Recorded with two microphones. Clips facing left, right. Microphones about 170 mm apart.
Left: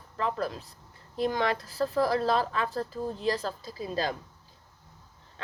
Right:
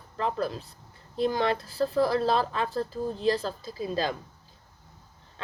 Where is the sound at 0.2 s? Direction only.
30° right (ahead or behind).